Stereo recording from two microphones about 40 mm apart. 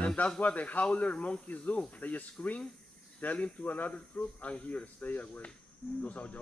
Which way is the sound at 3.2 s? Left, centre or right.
Left.